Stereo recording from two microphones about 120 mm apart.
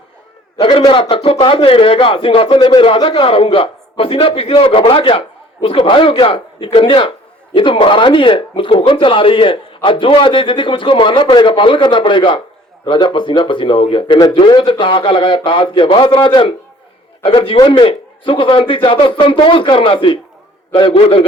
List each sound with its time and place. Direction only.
0.6 s speech: 45° left (ahead or behind)